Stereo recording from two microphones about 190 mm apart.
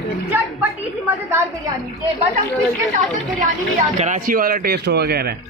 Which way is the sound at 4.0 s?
45° right (ahead or behind).